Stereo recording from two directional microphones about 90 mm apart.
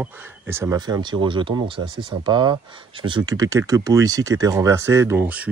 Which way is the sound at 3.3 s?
40° right (ahead or behind).